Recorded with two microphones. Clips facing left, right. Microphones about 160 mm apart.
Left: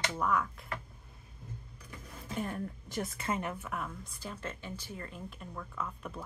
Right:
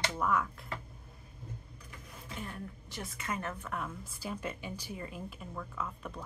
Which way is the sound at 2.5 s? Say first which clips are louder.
Left 5 dB; 45° left (ahead or behind).